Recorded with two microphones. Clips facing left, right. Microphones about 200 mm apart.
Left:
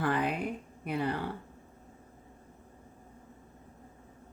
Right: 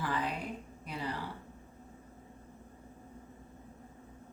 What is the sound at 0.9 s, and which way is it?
Speech, 60° left (ahead or behind).